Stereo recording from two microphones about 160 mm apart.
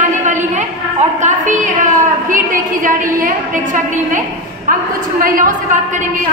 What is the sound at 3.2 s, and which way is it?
A woman's voice, 55° right (ahead or behind).